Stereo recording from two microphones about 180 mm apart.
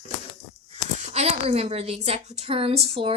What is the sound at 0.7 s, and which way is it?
A woman's voice, 35° right (ahead or behind).